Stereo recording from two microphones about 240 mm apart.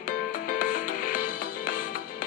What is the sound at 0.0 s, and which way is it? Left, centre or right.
Music, left.